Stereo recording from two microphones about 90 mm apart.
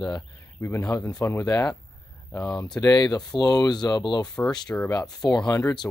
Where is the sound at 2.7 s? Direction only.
45° left (ahead or behind).